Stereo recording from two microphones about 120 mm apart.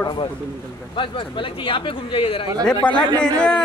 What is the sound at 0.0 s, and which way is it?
Speech, 40° left (ahead or behind).